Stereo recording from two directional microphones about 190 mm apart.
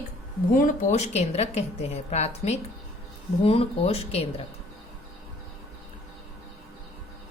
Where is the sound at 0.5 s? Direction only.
40° left (ahead or behind).